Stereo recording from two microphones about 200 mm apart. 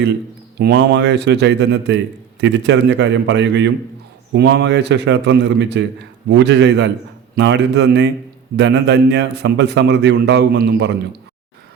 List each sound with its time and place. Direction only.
0.6 s a man's voice: 60° right (ahead or behind)